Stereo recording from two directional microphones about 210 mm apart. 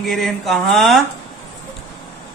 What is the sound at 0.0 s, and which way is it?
A man's voice, centre (ahead or behind).